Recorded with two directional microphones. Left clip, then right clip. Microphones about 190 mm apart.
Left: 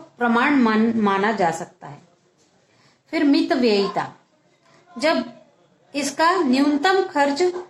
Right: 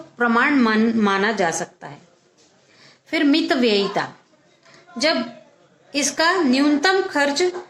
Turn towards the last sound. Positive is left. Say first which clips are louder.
# even
turn(degrees=-20)  # may be behind; listen again after turning